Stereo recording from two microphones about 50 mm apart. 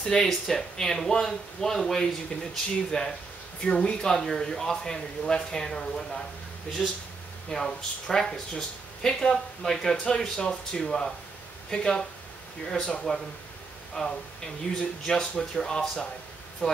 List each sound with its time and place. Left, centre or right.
0.0 s speech: centre
14.7 s speech: left
15.0 s speech: centre
16.6 s speech: centre